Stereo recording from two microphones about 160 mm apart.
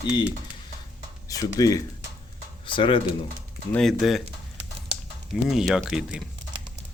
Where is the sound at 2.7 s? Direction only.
30° left (ahead or behind).